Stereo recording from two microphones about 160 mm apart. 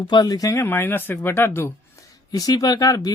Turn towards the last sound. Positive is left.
turn(degrees=25)  # may be behind; listen again after turning